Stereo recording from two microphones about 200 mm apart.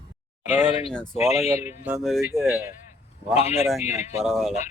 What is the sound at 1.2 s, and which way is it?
Speech, 35° left (ahead or behind).